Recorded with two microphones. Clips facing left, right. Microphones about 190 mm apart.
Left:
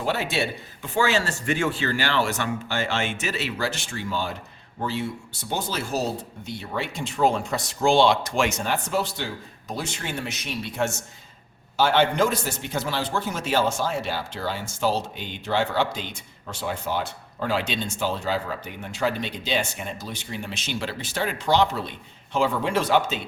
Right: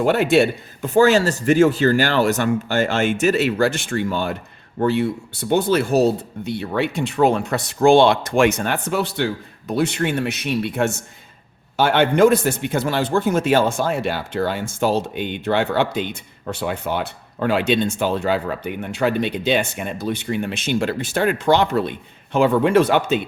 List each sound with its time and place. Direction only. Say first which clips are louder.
0.0 s a man's voice: right 10 dB; 55° right (ahead or behind)